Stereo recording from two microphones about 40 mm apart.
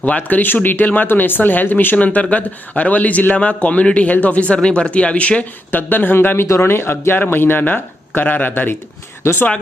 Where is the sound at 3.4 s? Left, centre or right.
Left.